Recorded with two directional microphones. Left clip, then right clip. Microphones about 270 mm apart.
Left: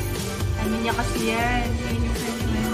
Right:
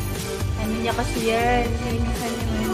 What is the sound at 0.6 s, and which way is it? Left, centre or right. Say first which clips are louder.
Speech: even; centre.